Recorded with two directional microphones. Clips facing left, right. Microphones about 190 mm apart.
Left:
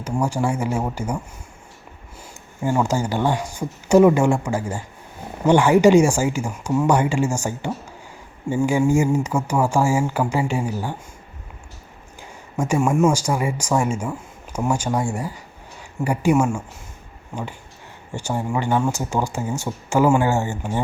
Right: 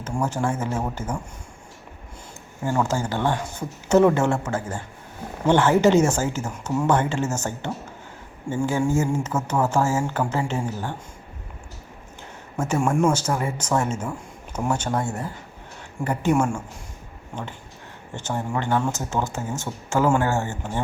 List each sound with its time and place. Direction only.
0.0 s speech: 10° left (ahead or behind)
2.6 s speech: 15° left (ahead or behind)
12.5 s speech: 10° left (ahead or behind)
18.3 s speech: 10° left (ahead or behind)